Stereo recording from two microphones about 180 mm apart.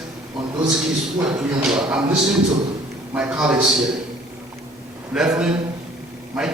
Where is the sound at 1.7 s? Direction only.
5° right (ahead or behind).